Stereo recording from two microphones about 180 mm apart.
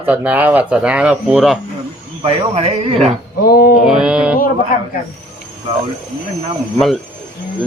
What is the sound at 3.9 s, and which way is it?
Speech, 5° right (ahead or behind).